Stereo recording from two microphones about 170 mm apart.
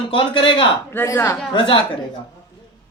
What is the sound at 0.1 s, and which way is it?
Speech, 30° left (ahead or behind).